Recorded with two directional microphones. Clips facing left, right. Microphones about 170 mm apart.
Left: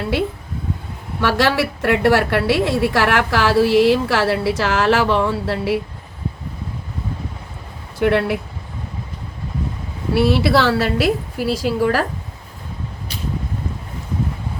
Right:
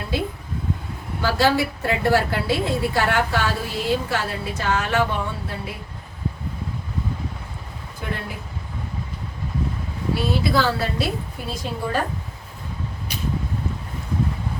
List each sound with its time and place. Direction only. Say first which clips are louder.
0.0 s a woman's voice: left 5 dB; 90° left
7.9 s speech: left 15 dB; 75° left (ahead or behind)
10.2 s a woman's voice: left 7 dB; 75° left (ahead or behind); by 12.0 s 90° left